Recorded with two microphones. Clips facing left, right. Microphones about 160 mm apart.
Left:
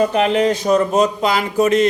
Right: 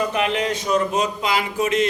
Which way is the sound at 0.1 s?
35° left (ahead or behind).